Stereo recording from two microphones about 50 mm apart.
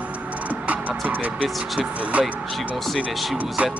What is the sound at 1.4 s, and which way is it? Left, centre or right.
Speech, centre.